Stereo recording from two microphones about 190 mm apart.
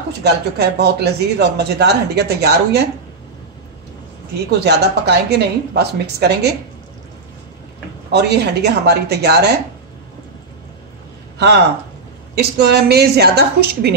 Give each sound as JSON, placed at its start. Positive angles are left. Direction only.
{"t": 0.2, "sound": "speech", "side_deg": -60}
{"t": 4.5, "sound": "speech", "side_deg": -60}
{"t": 8.1, "sound": "speech", "side_deg": -60}
{"t": 12.4, "sound": "speech", "side_deg": -60}